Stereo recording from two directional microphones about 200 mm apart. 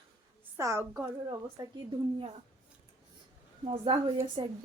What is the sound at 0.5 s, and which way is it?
A woman's voice, 15° right (ahead or behind).